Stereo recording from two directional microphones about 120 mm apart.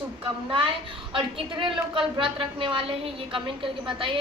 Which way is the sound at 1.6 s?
45° right (ahead or behind).